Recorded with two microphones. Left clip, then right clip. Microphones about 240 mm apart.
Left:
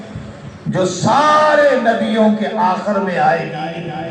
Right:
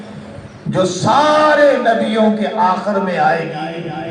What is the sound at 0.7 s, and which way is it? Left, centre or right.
A man's voice, right.